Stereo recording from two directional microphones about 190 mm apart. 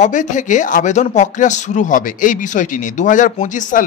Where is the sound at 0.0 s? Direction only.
40° left (ahead or behind).